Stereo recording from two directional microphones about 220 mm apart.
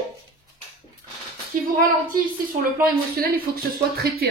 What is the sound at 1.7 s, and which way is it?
A woman's voice, 35° right (ahead or behind).